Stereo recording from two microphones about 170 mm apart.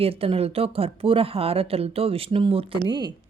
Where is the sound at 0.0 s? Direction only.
35° right (ahead or behind).